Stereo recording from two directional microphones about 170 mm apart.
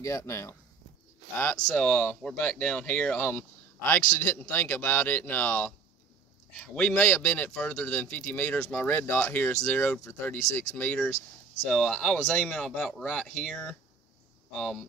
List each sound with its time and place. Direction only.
0.0 s speech: 20° left (ahead or behind); by 14.8 s centre (ahead or behind)